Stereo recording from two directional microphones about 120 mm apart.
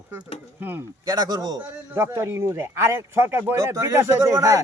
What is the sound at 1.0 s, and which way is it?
Speech, 35° right (ahead or behind).